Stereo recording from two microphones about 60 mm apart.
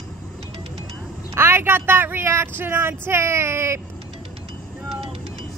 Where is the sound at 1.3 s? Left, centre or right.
Right.